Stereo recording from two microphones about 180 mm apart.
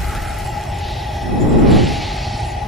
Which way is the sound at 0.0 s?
Centre (ahead or behind).